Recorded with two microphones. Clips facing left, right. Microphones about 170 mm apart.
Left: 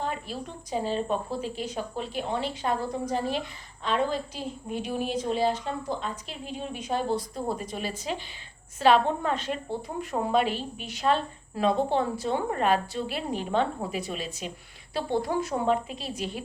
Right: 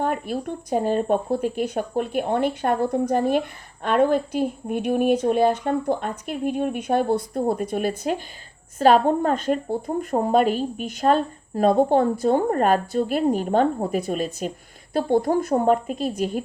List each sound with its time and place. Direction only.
0.0 s a woman's voice: 55° right (ahead or behind)